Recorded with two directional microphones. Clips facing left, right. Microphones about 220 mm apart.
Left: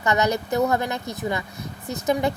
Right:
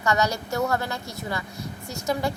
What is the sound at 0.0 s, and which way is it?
Speech, 20° left (ahead or behind).